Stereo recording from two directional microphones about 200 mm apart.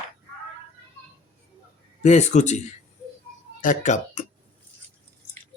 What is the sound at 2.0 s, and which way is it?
Speech, 35° left (ahead or behind).